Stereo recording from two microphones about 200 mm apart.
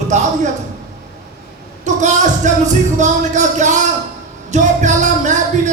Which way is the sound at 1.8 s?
35° right (ahead or behind).